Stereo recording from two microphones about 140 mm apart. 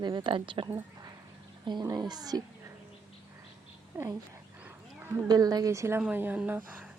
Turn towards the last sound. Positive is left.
turn(degrees=-10)  # may be behind; listen again after turning